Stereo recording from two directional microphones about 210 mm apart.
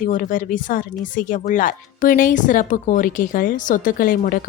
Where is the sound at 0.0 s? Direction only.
40° left (ahead or behind).